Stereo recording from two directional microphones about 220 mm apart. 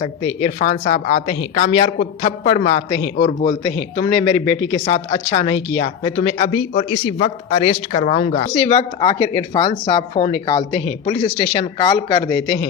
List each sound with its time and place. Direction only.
0.0 s speech: 30° left (ahead or behind)
7.9 s speech: 30° left (ahead or behind)